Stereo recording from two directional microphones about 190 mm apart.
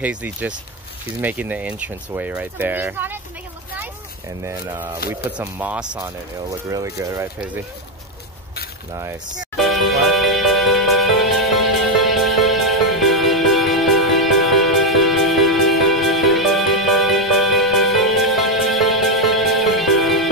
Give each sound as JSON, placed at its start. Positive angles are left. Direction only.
{"t": 0.0, "sound": "speech", "side_deg": -10}
{"t": 4.4, "sound": "speech", "side_deg": -15}
{"t": 5.4, "sound": "speech", "side_deg": -10}
{"t": 8.9, "sound": "speech", "side_deg": -20}
{"t": 9.6, "sound": "music", "side_deg": 0}